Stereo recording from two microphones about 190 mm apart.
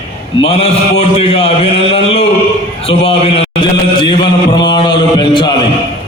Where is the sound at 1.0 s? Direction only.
30° left (ahead or behind).